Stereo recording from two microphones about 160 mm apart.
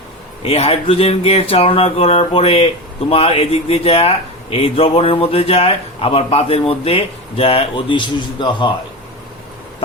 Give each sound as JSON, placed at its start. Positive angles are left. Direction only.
{"t": 0.4, "sound": "speech", "side_deg": 40}